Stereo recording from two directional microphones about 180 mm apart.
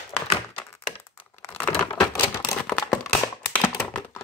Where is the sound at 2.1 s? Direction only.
20° left (ahead or behind).